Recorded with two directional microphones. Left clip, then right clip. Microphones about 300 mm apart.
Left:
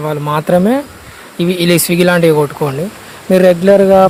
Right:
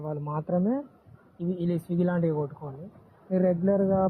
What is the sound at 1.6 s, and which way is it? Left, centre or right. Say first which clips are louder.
A man's voice: left 19 dB; left.